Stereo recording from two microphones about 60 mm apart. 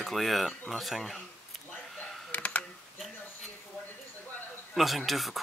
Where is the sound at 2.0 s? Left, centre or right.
Left.